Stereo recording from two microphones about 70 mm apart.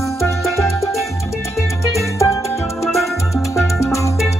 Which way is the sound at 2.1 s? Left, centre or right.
Left.